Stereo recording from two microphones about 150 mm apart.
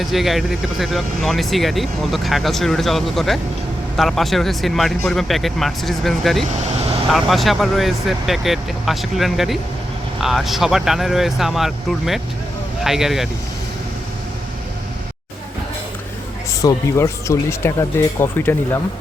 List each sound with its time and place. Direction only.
0.0 s speech: centre (ahead or behind)
6.7 s vehicle: 45° right (ahead or behind)
7.1 s speech: centre (ahead or behind)
16.5 s speech: 20° left (ahead or behind)